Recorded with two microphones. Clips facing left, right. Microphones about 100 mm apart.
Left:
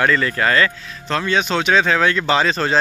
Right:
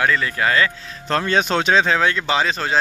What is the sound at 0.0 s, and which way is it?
Speech, 10° right (ahead or behind).